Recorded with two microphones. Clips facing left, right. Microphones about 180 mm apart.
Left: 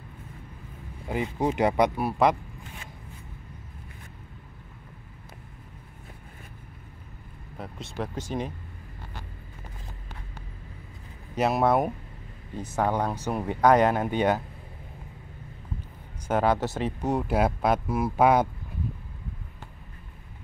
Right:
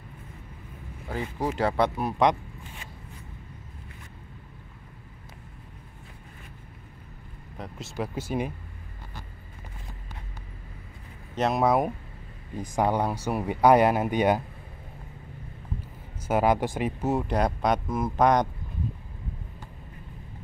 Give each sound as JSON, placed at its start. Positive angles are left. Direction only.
{"t": 1.0, "sound": "speech", "side_deg": 20}
{"t": 7.5, "sound": "vehicle", "side_deg": 0}
{"t": 8.0, "sound": "speech", "side_deg": -10}
{"t": 11.3, "sound": "speech", "side_deg": 5}
{"t": 12.5, "sound": "speech", "side_deg": -10}
{"t": 16.3, "sound": "speech", "side_deg": -10}